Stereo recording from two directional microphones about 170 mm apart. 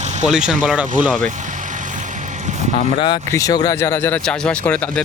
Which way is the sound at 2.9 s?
30° left (ahead or behind).